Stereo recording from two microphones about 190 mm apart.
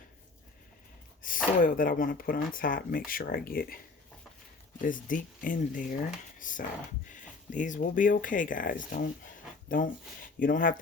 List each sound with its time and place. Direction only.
1.2 s a sound: 45° left (ahead or behind)
1.6 s speech: 45° left (ahead or behind)
4.8 s speech: 45° left (ahead or behind)